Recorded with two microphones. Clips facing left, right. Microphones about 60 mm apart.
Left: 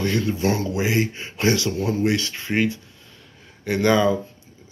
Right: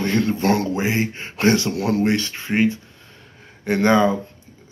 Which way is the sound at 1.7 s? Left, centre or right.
Right.